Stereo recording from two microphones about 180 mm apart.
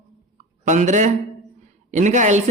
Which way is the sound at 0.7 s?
45° right (ahead or behind).